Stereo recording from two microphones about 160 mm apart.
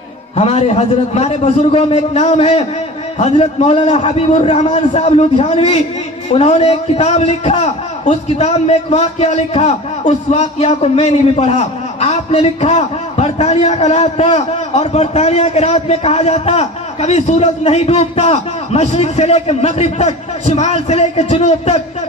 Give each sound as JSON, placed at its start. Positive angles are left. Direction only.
{"t": 0.4, "sound": "a man's voice", "side_deg": 40}